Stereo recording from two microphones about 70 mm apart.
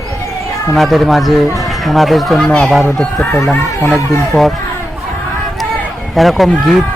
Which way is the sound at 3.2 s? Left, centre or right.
Left.